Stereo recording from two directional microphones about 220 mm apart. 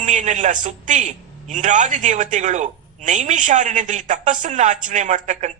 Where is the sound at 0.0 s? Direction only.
35° right (ahead or behind).